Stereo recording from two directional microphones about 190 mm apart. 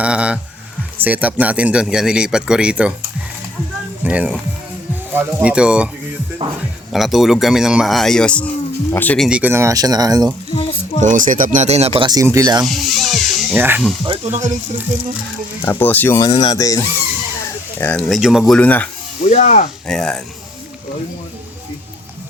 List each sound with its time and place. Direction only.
0.0 s a man's voice: 5° right (ahead or behind)
4.0 s speech: 10° right (ahead or behind)
6.9 s a man's voice: centre (ahead or behind); by 10.3 s 20° right (ahead or behind)
10.5 s a sound: 30° left (ahead or behind)
11.0 s speech: 45° right (ahead or behind); by 12.6 s 20° right (ahead or behind)
12.6 s speech: centre (ahead or behind)
14.0 s speech: 30° right (ahead or behind)
15.6 s a man's voice: 10° left (ahead or behind)
19.3 s speech: 40° left (ahead or behind)
19.9 s a man's voice: 5° left (ahead or behind)